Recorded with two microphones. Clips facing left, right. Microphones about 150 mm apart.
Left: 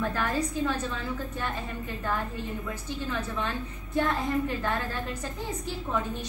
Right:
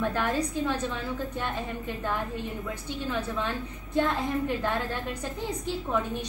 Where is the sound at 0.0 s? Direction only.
20° right (ahead or behind).